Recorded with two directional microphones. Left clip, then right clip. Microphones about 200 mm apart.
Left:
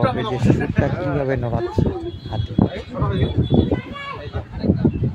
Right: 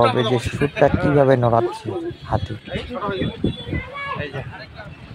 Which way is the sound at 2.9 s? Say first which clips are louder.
Right 3 dB; centre (ahead or behind).